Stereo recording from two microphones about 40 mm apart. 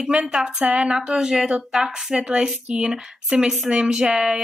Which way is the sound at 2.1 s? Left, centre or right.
Right.